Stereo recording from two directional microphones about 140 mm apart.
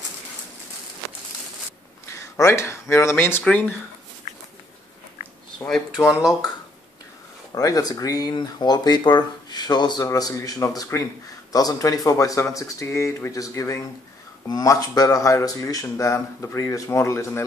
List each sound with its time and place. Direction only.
2.0 s speech: 20° left (ahead or behind)
5.9 s speech: 20° left (ahead or behind)
7.5 s speech: 25° left (ahead or behind)